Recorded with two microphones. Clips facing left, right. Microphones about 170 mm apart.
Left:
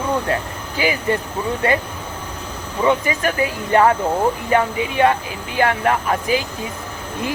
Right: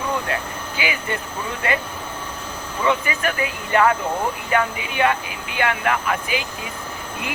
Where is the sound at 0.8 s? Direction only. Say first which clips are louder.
Left 7 dB; 35° left (ahead or behind).